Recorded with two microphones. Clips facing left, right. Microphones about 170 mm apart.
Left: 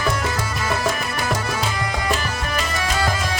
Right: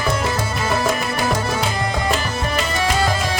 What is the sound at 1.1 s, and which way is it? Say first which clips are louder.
Music: right 3 dB; 25° right (ahead or behind).